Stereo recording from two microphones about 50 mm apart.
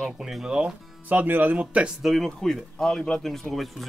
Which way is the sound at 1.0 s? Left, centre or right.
Right.